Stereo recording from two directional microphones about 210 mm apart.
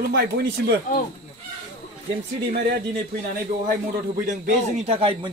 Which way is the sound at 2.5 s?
50° right (ahead or behind).